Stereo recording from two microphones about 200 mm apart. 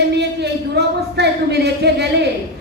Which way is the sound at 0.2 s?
55° right (ahead or behind).